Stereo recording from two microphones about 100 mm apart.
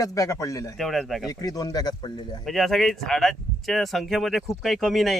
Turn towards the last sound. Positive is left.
turn(degrees=0)  # may be behind; listen again after turning